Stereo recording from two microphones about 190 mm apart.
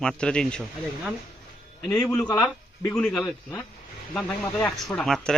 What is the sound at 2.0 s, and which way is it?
Speech, 5° left (ahead or behind).